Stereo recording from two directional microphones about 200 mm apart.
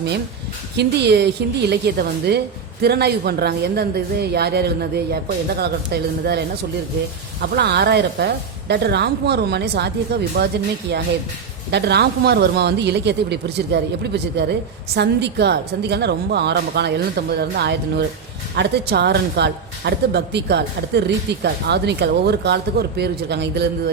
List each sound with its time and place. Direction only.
0.8 s a woman's voice: 55° right (ahead or behind)
7.4 s a woman's voice: 55° right (ahead or behind)